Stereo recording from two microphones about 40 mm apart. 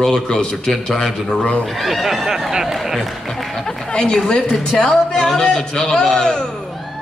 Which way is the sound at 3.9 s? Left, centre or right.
Centre.